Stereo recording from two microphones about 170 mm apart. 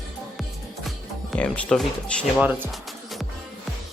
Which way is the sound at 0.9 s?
Centre (ahead or behind).